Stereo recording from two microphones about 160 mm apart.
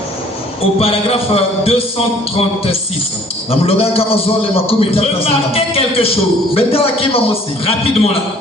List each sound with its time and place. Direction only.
0.8 s a man's voice: 35° left (ahead or behind)